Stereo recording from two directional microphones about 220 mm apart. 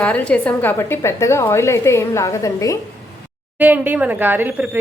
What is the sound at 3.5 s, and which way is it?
Speech, 10° right (ahead or behind).